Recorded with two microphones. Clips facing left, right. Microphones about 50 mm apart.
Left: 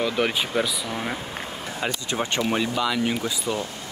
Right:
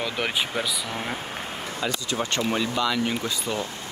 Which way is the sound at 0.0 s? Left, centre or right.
Centre.